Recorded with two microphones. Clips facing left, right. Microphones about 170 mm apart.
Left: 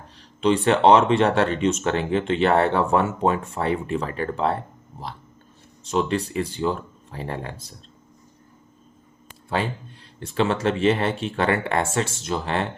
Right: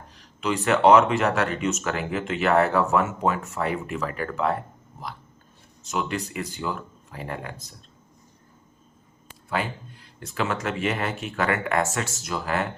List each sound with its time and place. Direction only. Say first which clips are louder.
0.2 s speech: left 7 dB; 30° left (ahead or behind)
9.5 s speech: left 3 dB; 30° left (ahead or behind)